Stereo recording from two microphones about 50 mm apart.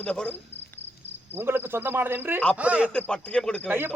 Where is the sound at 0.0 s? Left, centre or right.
Left.